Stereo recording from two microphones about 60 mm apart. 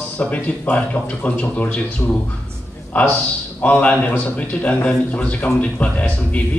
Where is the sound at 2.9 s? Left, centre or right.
Left.